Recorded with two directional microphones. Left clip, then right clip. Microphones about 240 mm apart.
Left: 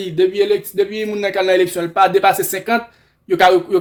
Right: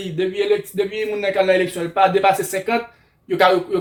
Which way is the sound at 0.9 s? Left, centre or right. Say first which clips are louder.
Even; left.